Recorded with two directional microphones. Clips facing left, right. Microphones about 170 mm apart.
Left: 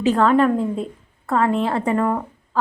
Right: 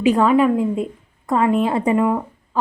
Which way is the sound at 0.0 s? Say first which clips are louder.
Right 1 dB; 10° right (ahead or behind).